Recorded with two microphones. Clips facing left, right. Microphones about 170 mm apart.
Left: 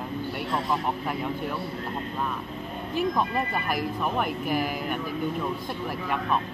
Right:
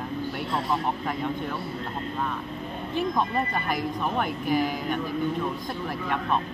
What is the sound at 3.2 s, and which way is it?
Speech, 5° left (ahead or behind).